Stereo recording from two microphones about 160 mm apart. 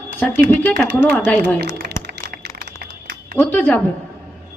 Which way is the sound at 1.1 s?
10° left (ahead or behind).